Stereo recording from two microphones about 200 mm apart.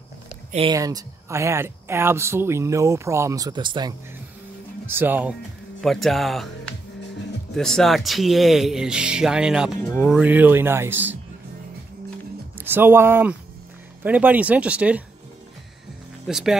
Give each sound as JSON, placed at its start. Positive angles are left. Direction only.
{"t": 0.5, "sound": "speech", "side_deg": -30}
{"t": 0.7, "sound": "speech", "side_deg": -15}
{"t": 4.8, "sound": "speech", "side_deg": -10}
{"t": 5.8, "sound": "speech", "side_deg": 0}
{"t": 12.5, "sound": "speech", "side_deg": -10}
{"t": 16.3, "sound": "speech", "side_deg": 0}